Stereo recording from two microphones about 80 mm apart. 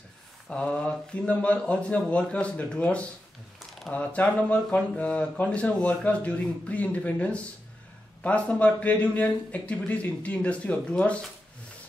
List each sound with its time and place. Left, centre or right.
0.5 s speech: centre